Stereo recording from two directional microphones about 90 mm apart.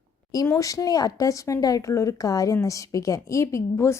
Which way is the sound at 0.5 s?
40° left (ahead or behind).